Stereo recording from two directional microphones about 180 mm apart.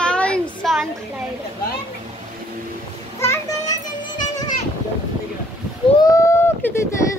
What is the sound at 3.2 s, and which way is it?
Children playing, 15° left (ahead or behind).